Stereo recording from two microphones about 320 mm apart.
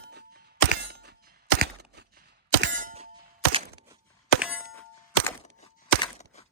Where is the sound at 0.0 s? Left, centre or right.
Right.